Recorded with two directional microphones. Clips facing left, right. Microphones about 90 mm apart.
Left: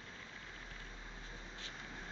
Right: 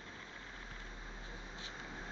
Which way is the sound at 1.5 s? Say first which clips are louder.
Right 2 dB; 20° right (ahead or behind).